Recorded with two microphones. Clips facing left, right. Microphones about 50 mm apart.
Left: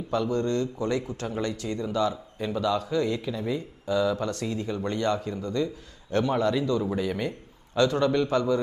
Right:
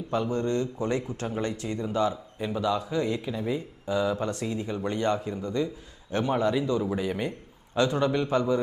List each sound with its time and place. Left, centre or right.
0.1 s speech: centre